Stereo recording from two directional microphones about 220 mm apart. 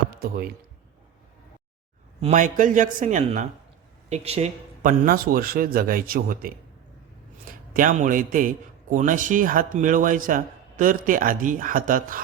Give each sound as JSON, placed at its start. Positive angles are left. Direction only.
{"t": 0.2, "sound": "speech", "side_deg": -45}
{"t": 2.2, "sound": "a man's voice", "side_deg": -35}
{"t": 7.7, "sound": "a man's voice", "side_deg": -40}